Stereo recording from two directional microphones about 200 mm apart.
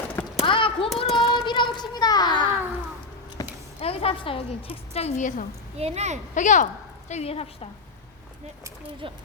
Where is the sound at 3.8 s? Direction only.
30° left (ahead or behind).